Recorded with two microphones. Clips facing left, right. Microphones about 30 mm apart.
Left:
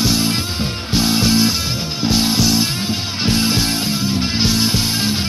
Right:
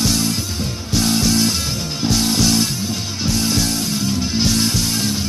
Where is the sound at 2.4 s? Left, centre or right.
Centre.